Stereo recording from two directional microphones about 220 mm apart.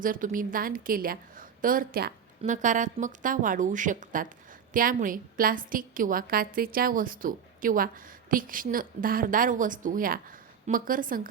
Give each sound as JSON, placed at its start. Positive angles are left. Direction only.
{"t": 0.0, "sound": "a woman's voice", "side_deg": -40}